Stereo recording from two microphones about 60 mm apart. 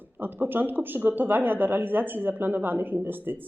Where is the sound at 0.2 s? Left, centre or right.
Right.